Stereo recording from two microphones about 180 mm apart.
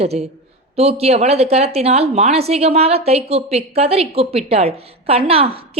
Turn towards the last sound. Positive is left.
turn(degrees=-30)  # may be behind; listen again after turning